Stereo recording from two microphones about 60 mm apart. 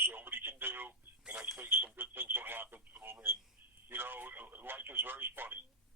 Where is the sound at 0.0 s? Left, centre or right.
Right.